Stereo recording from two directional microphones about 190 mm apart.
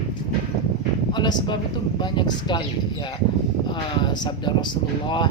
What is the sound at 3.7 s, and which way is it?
A man's voice, 25° left (ahead or behind).